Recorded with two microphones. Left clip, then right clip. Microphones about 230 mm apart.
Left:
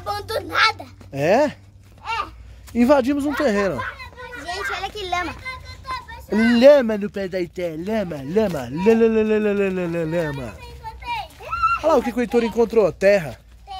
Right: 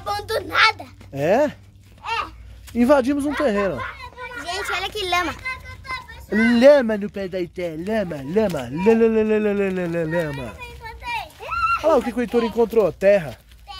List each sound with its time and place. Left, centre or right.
0.0 s a sound: centre
2.7 s speech: centre
4.4 s children playing: centre; by 5.3 s right
6.3 s speech: centre
11.4 s a sound: right
11.8 s speech: centre